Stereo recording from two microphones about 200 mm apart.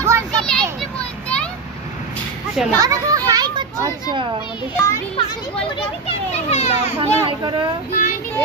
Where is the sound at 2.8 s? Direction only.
15° right (ahead or behind).